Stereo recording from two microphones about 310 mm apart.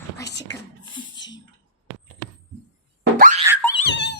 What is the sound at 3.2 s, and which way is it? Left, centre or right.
Boing, right.